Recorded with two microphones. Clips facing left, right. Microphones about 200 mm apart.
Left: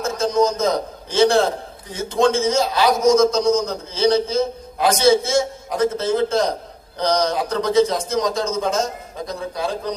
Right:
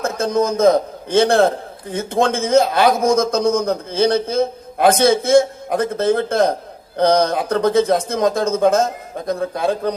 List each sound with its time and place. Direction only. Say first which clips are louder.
0.0 s a man's voice: even; 55° right (ahead or behind)